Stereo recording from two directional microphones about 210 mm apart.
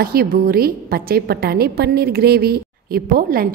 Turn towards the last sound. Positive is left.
turn(degrees=-45)  # may be behind; listen again after turning